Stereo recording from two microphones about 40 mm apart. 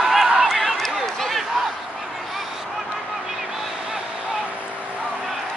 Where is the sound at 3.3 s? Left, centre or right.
Centre.